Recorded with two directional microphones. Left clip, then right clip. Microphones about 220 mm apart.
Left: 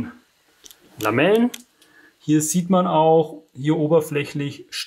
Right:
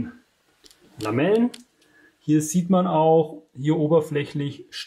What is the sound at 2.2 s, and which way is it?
Speech, centre (ahead or behind).